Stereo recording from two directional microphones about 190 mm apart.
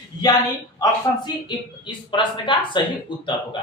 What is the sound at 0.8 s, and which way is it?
Speech, 25° left (ahead or behind).